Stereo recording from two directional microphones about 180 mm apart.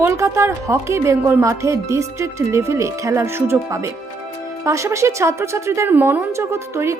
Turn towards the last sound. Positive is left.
turn(degrees=-15)  # may be behind; listen again after turning